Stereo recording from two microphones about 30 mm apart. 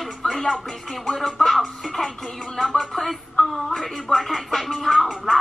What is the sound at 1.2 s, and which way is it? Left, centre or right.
Music, centre.